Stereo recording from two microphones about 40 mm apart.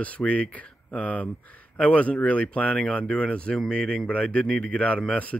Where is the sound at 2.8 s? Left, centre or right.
Left.